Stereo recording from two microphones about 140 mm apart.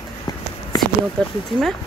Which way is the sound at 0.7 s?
25° left (ahead or behind).